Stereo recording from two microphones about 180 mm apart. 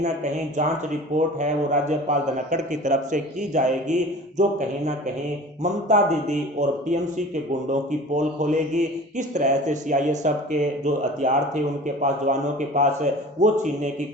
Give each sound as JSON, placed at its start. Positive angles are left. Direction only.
{"t": 0.0, "sound": "a man's voice", "side_deg": -40}